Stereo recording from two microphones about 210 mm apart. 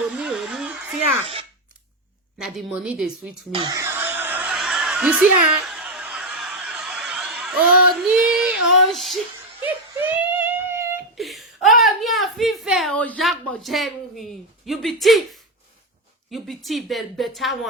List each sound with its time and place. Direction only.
0.1 s a sound: 5° right (ahead or behind)
1.2 s speech: 25° right (ahead or behind)
2.4 s speech: 5° right (ahead or behind)
3.5 s snicker: 20° right (ahead or behind); by 9.1 s centre (ahead or behind)
10.0 s child singing: 10° right (ahead or behind)
11.2 s a sound: centre (ahead or behind)
14.7 s speech: centre (ahead or behind)